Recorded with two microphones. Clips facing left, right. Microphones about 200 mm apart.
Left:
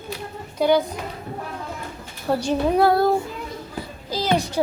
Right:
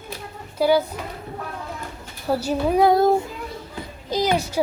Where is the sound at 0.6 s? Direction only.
5° right (ahead or behind).